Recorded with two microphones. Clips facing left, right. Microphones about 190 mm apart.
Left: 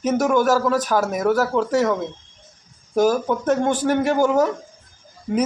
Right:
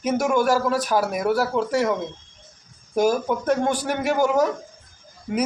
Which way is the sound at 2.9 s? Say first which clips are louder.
Left 2 dB; 45° left (ahead or behind).